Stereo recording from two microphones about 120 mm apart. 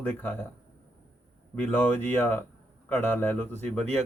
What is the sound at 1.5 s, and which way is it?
Mantra, 15° left (ahead or behind).